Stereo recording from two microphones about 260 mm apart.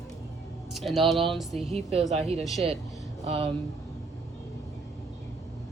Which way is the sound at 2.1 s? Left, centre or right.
Right.